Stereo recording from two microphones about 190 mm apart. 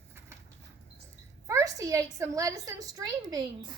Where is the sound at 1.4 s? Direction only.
15° right (ahead or behind).